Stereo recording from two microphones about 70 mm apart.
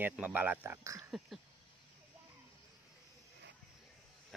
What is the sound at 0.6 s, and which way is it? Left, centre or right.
Speech, right.